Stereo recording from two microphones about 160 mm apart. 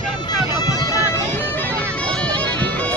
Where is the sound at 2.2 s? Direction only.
10° left (ahead or behind).